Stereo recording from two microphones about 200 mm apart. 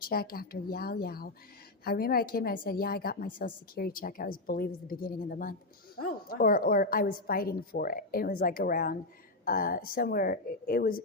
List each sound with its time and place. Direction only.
0.1 s a woman's voice: 50° left (ahead or behind)